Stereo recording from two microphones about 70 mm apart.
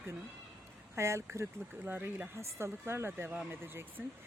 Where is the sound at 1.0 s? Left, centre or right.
Right.